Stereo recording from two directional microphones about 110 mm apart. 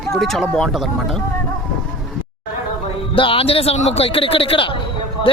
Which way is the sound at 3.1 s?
55° left (ahead or behind).